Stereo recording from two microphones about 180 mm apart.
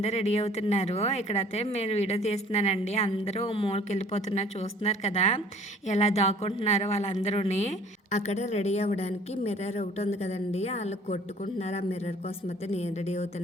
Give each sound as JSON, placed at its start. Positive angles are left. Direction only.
{"t": 0.0, "sound": "speech", "side_deg": 40}